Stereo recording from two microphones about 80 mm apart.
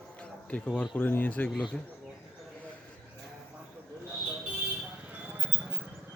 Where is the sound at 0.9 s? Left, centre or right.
Left.